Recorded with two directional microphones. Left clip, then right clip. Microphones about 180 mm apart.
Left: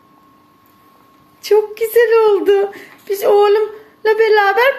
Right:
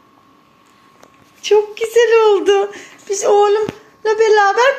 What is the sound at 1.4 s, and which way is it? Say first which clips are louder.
Speech: even; 10° left (ahead or behind).